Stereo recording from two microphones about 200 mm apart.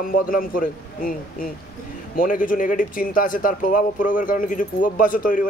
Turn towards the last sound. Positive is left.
turn(degrees=45)  # may be behind; listen again after turning